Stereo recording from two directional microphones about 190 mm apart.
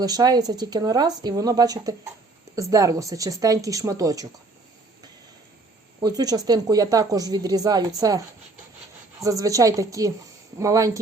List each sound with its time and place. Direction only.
0.0 s speech: 20° right (ahead or behind)
6.0 s speech: 20° right (ahead or behind)
9.2 s speech: 15° right (ahead or behind)